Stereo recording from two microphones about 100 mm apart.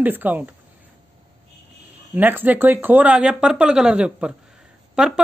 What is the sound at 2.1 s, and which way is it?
Speech, 20° right (ahead or behind).